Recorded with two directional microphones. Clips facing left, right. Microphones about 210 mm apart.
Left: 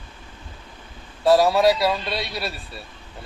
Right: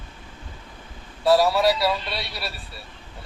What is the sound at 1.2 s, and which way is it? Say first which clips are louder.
Speech: left 2 dB; 15° left (ahead or behind).